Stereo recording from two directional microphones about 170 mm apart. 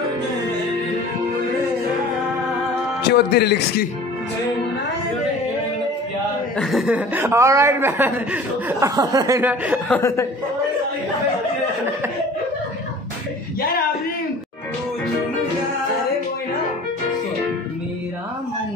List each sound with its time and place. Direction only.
3.1 s speech: 70° left (ahead or behind)
6.6 s speech: centre (ahead or behind); by 9.5 s 20° right (ahead or behind)
9.8 s speech: 15° left (ahead or behind)